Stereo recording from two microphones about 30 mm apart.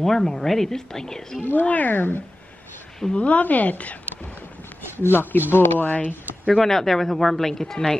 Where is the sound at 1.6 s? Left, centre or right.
Left.